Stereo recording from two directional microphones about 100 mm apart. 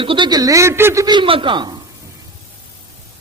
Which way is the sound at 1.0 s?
50° right (ahead or behind).